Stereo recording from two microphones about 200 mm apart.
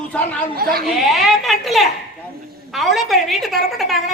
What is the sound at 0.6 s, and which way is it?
Speech, 50° right (ahead or behind).